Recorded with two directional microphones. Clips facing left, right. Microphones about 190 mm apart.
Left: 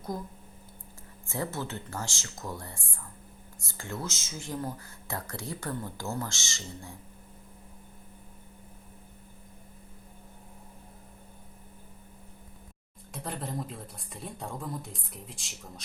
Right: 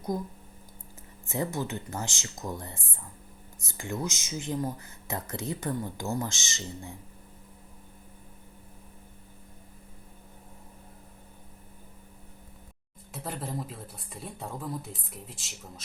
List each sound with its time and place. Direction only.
1.3 s speech: 15° right (ahead or behind)
13.1 s speech: centre (ahead or behind)